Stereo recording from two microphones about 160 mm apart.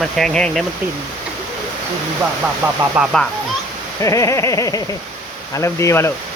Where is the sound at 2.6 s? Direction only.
15° right (ahead or behind).